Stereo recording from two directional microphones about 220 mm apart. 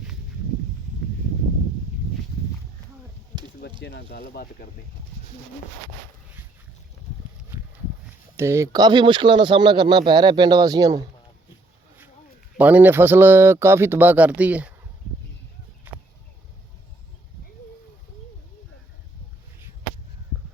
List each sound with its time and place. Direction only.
3.8 s speech: 45° left (ahead or behind)
7.5 s a sound: 10° right (ahead or behind)
8.4 s speech: 10° right (ahead or behind)
12.5 s speech: 5° right (ahead or behind)